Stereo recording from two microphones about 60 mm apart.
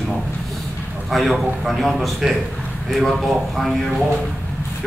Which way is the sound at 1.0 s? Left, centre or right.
Centre.